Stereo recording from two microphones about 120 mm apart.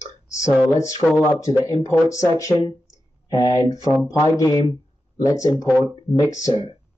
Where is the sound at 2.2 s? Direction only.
30° left (ahead or behind).